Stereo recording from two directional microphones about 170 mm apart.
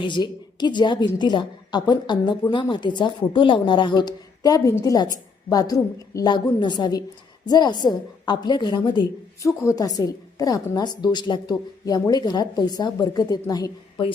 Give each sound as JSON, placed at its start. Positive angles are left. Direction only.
{"t": 0.0, "sound": "a woman's voice", "side_deg": 25}